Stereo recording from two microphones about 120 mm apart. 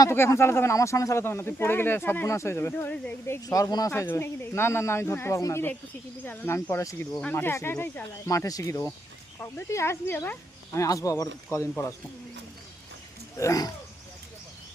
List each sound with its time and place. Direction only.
0.0 s speech: 25° left (ahead or behind)
3.2 s speech: 30° left (ahead or behind)
3.9 s speech: 20° left (ahead or behind)
7.1 s speech: 10° left (ahead or behind)
7.3 s speech: 20° left (ahead or behind)
13.3 s speech: 25° left (ahead or behind)